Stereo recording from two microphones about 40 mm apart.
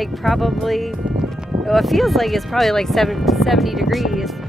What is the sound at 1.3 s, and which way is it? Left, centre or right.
Music, centre.